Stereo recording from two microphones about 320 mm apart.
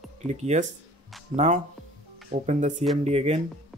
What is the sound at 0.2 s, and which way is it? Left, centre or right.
Speech, centre.